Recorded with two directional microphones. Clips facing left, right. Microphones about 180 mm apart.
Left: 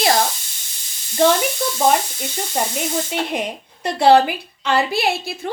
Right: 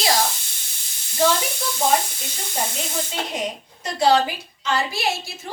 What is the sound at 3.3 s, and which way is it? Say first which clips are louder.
A woman's voice: left 3 dB; 60° left (ahead or behind).